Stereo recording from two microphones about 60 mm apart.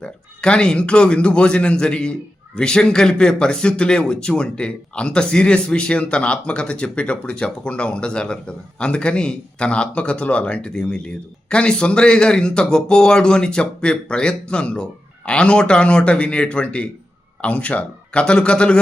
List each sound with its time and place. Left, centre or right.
0.0 s speech: centre